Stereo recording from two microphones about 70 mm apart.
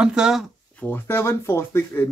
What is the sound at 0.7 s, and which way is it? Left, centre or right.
Speech, left.